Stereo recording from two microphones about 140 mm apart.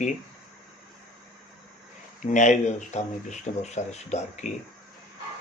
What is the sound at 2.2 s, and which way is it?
Speech, 60° left (ahead or behind).